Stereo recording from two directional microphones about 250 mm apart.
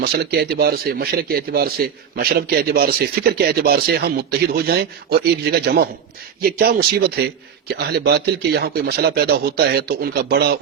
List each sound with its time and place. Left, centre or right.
0.0 s a man's voice: right